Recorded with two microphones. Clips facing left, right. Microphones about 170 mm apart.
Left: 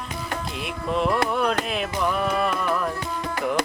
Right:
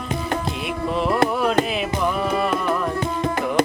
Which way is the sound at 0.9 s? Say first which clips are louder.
Even; centre (ahead or behind).